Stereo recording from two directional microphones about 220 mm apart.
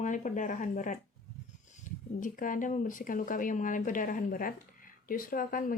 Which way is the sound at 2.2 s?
35° left (ahead or behind).